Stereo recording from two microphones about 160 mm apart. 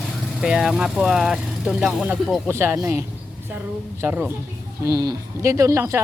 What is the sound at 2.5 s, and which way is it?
A woman's voice, 15° right (ahead or behind).